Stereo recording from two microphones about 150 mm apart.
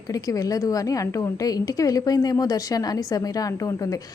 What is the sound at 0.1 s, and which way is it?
A woman's voice, 25° left (ahead or behind).